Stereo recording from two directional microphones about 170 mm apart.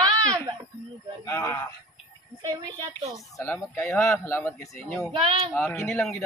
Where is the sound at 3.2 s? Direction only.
15° left (ahead or behind).